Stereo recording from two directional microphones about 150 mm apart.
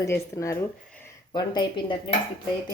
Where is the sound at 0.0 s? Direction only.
20° left (ahead or behind).